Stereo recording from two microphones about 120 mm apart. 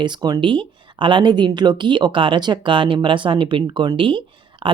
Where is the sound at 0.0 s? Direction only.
35° right (ahead or behind).